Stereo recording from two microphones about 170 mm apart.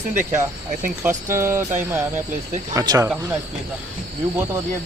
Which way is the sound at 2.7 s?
20° right (ahead or behind).